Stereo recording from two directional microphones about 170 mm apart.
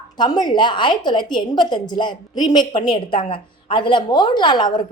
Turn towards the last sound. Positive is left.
turn(degrees=25)  # may be behind; listen again after turning